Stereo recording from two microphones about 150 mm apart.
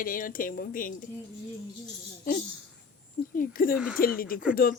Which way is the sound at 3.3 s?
65° left (ahead or behind).